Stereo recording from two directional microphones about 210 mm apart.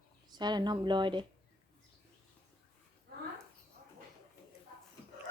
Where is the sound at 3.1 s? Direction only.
45° right (ahead or behind).